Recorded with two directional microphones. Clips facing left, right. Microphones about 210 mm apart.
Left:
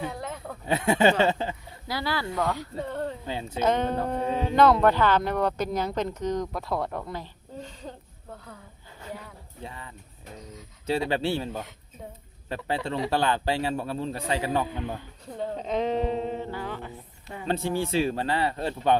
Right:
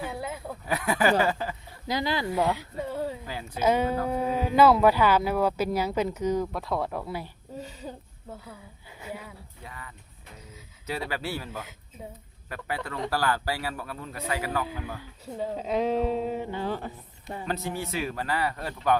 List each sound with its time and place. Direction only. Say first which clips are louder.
0.1 s a sound: right 1 dB; 5° right (ahead or behind)
0.6 s a man's voice: left 4 dB; 25° left (ahead or behind)
1.9 s speech: right 2 dB; 20° right (ahead or behind)
2.4 s speech: right 1 dB; 5° right (ahead or behind)
3.2 s a man's voice: left 4 dB; 25° left (ahead or behind)
3.6 s speech: right 1 dB; 10° right (ahead or behind)
9.6 s a man's voice: left 3 dB; 25° left (ahead or behind)
11.1 s a man's voice: left 6 dB; 25° left (ahead or behind)
15.4 s speech: even; 5° right (ahead or behind)
16.6 s speech: right 4 dB; 35° right (ahead or behind)
17.4 s a man's voice: left 5 dB; 30° left (ahead or behind)